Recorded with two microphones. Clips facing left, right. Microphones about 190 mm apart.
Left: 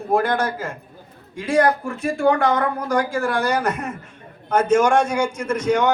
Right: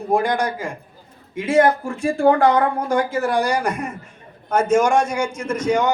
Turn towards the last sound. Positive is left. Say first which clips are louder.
# even
turn(degrees=-10)  # may be behind; listen again after turning